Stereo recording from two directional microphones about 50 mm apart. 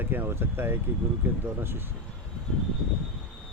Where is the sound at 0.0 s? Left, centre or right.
Right.